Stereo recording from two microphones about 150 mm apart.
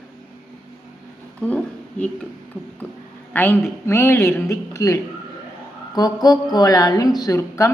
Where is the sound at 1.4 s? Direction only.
10° left (ahead or behind).